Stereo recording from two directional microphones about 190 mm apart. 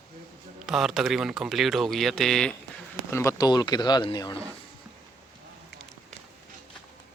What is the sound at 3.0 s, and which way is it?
Speech, 15° left (ahead or behind).